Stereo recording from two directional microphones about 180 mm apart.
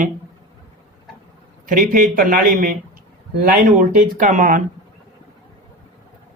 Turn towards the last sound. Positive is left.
turn(degrees=-45)  # may be behind; listen again after turning